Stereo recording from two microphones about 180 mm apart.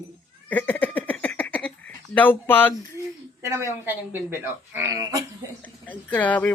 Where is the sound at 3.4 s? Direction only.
15° right (ahead or behind).